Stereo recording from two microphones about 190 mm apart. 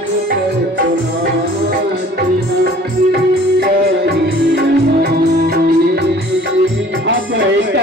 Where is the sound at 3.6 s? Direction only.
60° right (ahead or behind).